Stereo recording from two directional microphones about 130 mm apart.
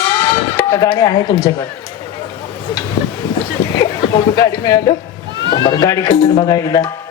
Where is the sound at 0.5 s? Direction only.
25° left (ahead or behind).